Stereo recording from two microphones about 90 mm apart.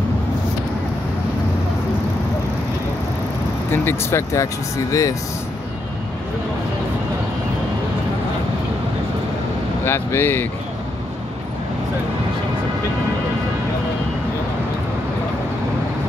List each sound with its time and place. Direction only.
3.7 s speech: 25° left (ahead or behind)
9.8 s speech: 25° left (ahead or behind)